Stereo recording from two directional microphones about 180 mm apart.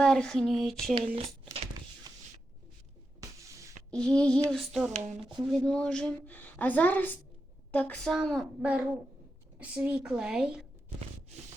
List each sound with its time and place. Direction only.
0.0 s a woman's voice: 5° left (ahead or behind)
2.1 s shuffling cards: 20° right (ahead or behind)
3.2 s a sound: 15° right (ahead or behind)
3.9 s a woman's voice: 5° left (ahead or behind)
4.9 s speech: 25° right (ahead or behind)
5.4 s a woman's voice: centre (ahead or behind)